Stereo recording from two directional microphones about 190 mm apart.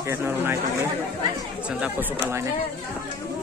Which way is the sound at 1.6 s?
5° right (ahead or behind).